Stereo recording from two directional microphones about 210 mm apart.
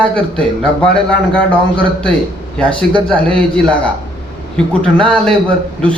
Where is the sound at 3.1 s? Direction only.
5° left (ahead or behind).